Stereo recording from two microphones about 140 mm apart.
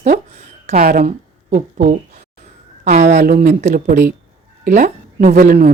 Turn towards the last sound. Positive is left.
turn(degrees=-90)